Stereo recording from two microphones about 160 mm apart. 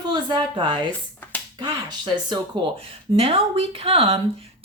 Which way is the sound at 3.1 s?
35° right (ahead or behind).